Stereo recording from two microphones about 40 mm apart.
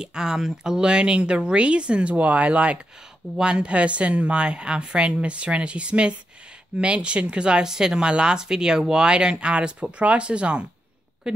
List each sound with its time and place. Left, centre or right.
0.0 s speech: centre
11.3 s speech: centre